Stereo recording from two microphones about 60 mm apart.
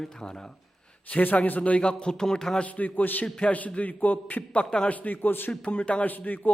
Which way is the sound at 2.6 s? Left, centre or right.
Left.